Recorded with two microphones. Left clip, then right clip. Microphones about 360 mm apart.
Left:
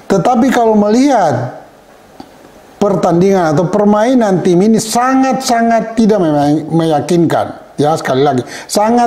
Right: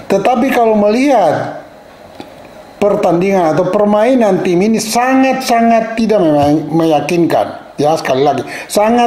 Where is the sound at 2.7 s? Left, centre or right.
Left.